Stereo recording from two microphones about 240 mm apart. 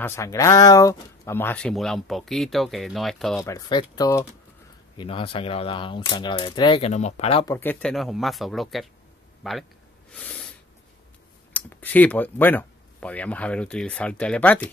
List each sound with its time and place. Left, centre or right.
0.0 s speech: centre
3.4 s speech: centre
7.5 s speech: centre
10.1 s snort: centre
11.5 s speech: centre